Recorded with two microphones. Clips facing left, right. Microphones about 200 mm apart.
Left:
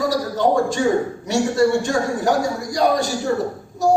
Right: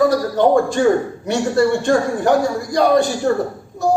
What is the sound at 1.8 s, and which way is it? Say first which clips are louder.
A man's voice: right 4 dB; 55° right (ahead or behind).